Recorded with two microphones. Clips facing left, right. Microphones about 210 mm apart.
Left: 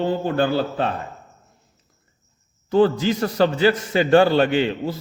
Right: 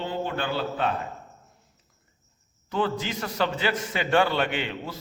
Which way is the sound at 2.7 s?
35° left (ahead or behind).